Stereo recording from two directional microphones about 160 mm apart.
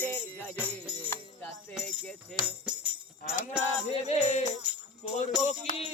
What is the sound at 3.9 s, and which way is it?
Music, 40° left (ahead or behind).